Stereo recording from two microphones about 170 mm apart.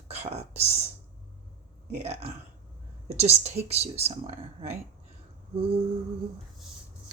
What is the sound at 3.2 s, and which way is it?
Speech, 40° right (ahead or behind).